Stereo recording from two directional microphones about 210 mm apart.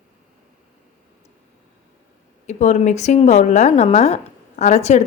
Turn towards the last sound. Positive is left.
turn(degrees=30)  # may be behind; listen again after turning